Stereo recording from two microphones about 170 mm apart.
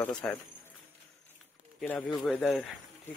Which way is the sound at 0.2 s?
5° left (ahead or behind).